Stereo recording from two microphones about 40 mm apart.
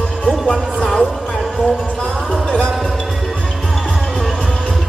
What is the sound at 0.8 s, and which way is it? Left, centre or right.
Music, centre.